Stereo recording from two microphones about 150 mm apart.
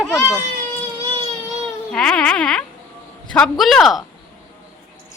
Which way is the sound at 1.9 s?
5° left (ahead or behind).